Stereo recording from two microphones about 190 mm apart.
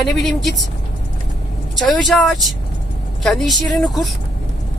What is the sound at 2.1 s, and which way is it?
Speech, centre (ahead or behind).